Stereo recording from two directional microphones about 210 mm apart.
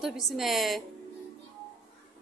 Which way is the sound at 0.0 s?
Centre (ahead or behind).